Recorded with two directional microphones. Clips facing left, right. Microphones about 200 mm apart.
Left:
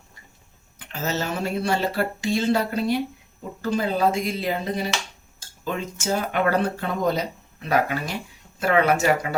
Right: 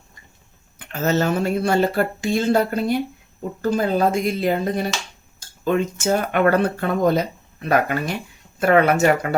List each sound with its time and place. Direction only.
0.8 s speech: 55° right (ahead or behind)